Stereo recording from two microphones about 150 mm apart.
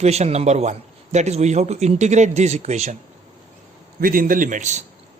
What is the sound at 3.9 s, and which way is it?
Speech, 70° right (ahead or behind).